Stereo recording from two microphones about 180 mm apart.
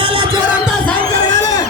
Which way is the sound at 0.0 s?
30° right (ahead or behind).